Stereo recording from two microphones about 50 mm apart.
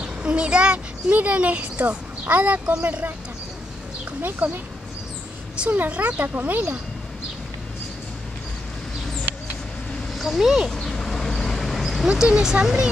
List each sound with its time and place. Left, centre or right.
0.0 s a child's voice: right
4.2 s speech: right
5.7 s speech: right
10.1 s speech: centre
10.7 s a sound: centre
12.1 s speech: centre